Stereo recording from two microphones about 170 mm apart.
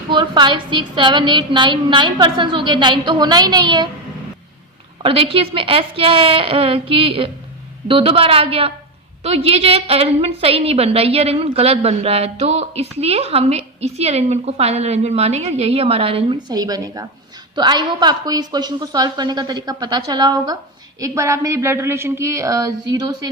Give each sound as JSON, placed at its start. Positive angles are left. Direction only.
{"t": 0.1, "sound": "a woman's voice", "side_deg": -25}
{"t": 5.0, "sound": "a woman's voice", "side_deg": -30}
{"t": 16.5, "sound": "a woman's voice", "side_deg": -20}